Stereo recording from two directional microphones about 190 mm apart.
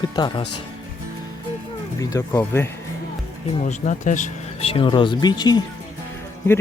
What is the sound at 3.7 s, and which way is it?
Speech, 40° left (ahead or behind).